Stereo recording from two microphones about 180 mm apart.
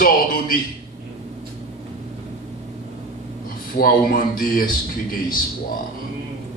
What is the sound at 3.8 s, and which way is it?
A man's voice, 55° left (ahead or behind).